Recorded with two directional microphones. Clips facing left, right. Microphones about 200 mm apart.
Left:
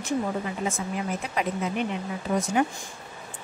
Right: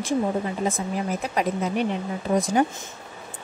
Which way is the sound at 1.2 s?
40° right (ahead or behind).